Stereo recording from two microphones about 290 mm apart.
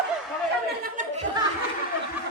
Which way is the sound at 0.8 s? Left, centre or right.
Right.